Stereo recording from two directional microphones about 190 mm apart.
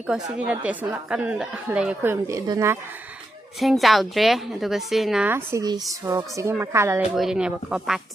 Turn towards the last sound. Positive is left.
turn(degrees=-5)  # may be behind; listen again after turning